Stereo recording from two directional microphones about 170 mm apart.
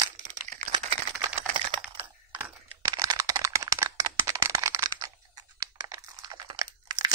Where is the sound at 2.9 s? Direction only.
25° right (ahead or behind).